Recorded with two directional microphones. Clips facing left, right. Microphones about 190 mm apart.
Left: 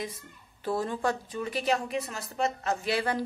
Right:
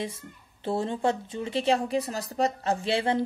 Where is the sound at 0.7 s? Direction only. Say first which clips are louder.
Right 2 dB; 25° right (ahead or behind).